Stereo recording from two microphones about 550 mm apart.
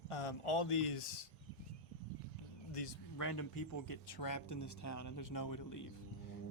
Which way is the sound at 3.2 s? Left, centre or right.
Left.